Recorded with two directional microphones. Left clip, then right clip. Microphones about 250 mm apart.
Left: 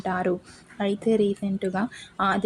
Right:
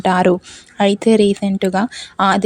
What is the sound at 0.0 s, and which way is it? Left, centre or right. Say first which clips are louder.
Speech: right 12 dB; right.